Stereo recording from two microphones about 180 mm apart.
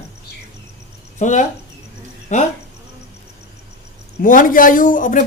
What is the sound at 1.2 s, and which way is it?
A man's voice, 45° left (ahead or behind).